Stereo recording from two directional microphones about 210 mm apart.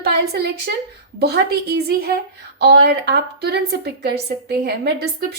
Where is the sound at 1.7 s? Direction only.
50° right (ahead or behind).